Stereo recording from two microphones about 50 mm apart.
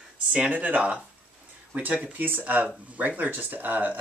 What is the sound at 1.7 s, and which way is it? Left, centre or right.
Speech, right.